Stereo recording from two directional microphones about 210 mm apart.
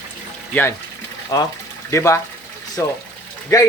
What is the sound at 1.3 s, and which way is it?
Speech, 15° left (ahead or behind).